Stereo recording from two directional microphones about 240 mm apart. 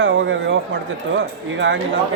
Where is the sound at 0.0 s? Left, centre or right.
Right.